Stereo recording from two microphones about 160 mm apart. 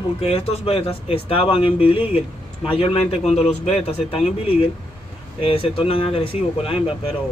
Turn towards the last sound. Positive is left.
turn(degrees=35)  # may be behind; listen again after turning